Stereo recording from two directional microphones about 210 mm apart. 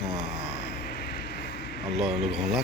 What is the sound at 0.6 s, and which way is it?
Vehicle, 45° left (ahead or behind).